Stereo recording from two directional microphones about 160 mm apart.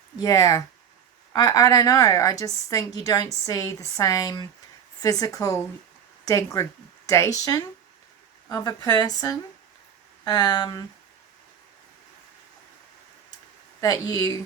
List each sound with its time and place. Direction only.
0.2 s a woman's voice: 20° left (ahead or behind)
13.8 s a woman's voice: 25° left (ahead or behind)